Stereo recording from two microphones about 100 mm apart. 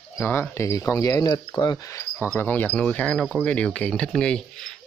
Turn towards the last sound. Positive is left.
turn(degrees=10)  # may be behind; listen again after turning